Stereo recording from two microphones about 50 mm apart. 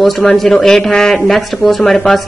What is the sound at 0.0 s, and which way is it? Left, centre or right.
A woman's voice, centre.